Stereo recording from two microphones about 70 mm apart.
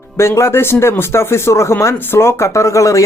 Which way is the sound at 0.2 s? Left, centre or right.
Left.